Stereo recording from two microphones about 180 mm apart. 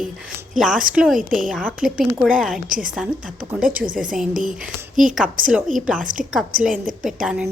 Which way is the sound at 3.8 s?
50° right (ahead or behind).